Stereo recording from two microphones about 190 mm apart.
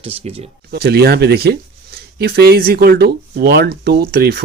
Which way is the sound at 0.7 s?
55° right (ahead or behind).